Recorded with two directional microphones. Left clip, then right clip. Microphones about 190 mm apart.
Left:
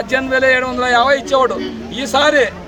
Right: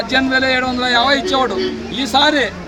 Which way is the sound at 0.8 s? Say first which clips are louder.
Left 2 dB; 30° left (ahead or behind).